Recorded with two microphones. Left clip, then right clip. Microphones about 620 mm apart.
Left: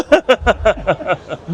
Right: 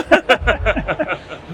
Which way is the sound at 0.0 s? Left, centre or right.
Left.